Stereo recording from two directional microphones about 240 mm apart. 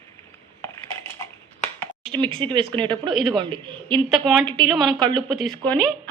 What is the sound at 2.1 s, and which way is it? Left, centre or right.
Speech, right.